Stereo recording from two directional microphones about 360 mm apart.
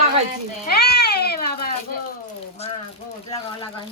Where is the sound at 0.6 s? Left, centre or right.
Left.